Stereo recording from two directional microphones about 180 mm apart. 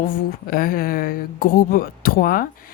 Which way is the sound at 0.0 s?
55° left (ahead or behind).